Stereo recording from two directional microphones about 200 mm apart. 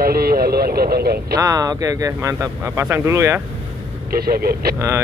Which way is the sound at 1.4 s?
15° right (ahead or behind).